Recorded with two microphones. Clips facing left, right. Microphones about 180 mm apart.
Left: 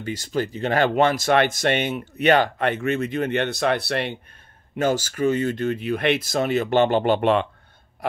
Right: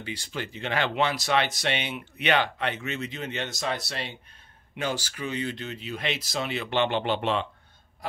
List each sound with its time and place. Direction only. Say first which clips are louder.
0.0 s speech: left 9 dB; 45° left (ahead or behind); by 4.2 s 60° left (ahead or behind)
4.7 s speech: left 9 dB; 45° left (ahead or behind)